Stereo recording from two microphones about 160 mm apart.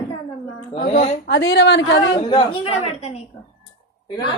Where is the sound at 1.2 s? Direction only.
90° left.